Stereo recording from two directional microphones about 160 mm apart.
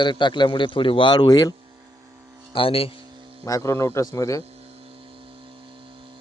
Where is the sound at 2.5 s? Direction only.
35° left (ahead or behind).